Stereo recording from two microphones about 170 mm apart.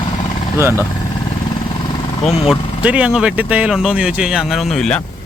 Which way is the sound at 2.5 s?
5° right (ahead or behind).